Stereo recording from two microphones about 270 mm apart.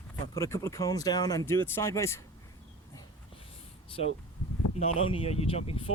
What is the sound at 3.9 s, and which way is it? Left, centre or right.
Speech, left.